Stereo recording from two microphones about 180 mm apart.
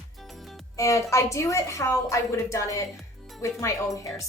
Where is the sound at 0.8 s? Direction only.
15° left (ahead or behind).